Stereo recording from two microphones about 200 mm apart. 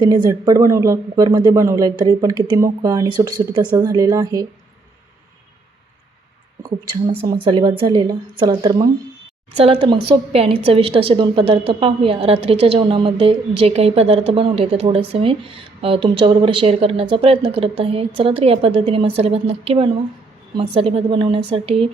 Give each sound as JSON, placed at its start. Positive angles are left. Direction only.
{"t": 0.3, "sound": "speech", "side_deg": -15}
{"t": 6.6, "sound": "speech", "side_deg": -25}